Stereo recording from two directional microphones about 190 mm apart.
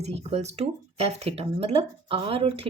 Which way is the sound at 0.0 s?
35° right (ahead or behind).